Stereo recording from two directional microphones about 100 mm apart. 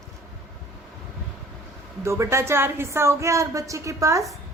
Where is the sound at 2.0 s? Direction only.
30° right (ahead or behind).